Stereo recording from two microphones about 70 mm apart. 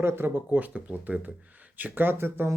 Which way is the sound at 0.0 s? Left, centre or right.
Right.